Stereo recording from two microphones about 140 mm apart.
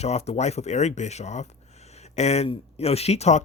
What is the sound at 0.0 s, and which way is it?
Speech, 50° left (ahead or behind).